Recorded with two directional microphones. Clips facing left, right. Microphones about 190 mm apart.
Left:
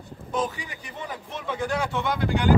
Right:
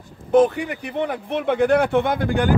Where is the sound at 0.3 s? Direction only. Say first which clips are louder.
Right 13 dB; 60° right (ahead or behind).